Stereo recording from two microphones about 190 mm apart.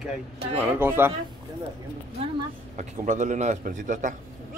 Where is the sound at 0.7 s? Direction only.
10° right (ahead or behind).